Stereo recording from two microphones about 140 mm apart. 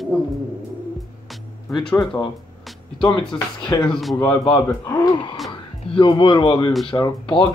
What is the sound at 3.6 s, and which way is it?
Speech, 30° left (ahead or behind).